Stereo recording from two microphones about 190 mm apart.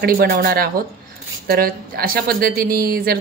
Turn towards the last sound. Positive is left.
turn(degrees=-50)  # may be behind; listen again after turning